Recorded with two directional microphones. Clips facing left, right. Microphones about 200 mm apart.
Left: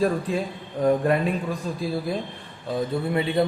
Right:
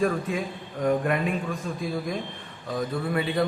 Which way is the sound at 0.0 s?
35° left (ahead or behind).